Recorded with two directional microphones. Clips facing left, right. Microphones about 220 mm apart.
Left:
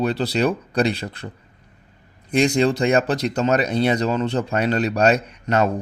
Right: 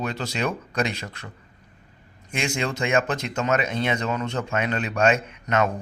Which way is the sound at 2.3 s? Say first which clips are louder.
Left 10 dB; 35° left (ahead or behind).